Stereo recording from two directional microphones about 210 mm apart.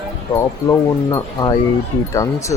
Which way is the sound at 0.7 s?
15° left (ahead or behind).